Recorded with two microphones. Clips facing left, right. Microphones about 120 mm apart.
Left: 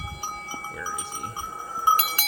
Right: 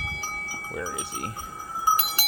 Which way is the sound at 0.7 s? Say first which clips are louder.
Right 5 dB; 70° right (ahead or behind).